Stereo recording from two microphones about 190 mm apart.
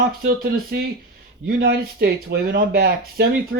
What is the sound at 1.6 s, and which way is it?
Speech, 50° right (ahead or behind).